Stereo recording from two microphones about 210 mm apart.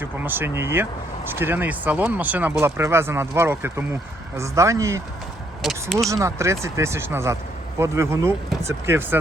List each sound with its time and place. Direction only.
0.0 s speech: 10° right (ahead or behind)
5.6 s speech: centre (ahead or behind)
6.1 s speech: 15° right (ahead or behind)